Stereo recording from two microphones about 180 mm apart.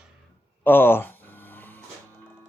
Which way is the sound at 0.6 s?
10° left (ahead or behind).